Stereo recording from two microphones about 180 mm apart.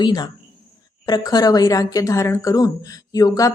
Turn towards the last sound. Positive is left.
turn(degrees=20)  # may be behind; listen again after turning